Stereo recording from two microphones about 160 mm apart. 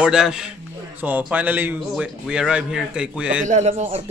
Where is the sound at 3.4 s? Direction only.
45° right (ahead or behind).